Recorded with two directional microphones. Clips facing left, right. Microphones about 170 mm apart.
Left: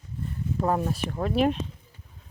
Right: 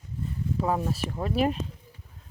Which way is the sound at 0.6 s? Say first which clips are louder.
Left 2 dB; 5° right (ahead or behind).